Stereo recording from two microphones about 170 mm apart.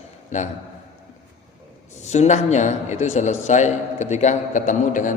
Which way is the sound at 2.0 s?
45° left (ahead or behind).